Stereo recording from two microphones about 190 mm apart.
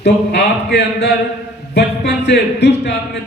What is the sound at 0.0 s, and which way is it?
Speech, 60° left (ahead or behind).